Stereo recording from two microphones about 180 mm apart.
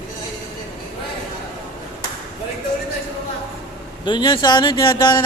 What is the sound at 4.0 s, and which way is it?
Speech, 25° left (ahead or behind).